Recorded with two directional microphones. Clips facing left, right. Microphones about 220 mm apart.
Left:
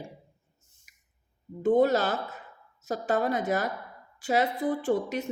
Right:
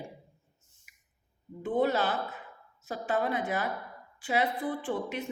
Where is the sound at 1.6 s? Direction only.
40° left (ahead or behind).